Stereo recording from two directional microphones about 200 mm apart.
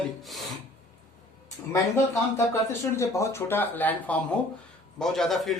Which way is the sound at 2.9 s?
15° left (ahead or behind).